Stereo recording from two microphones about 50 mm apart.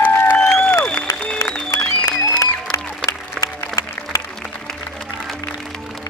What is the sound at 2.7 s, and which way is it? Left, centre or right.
Music, left.